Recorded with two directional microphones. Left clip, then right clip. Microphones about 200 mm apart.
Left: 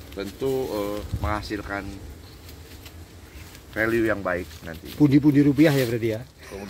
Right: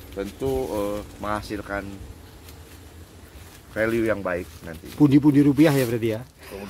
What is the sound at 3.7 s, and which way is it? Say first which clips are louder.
Speech: even; 40° right (ahead or behind).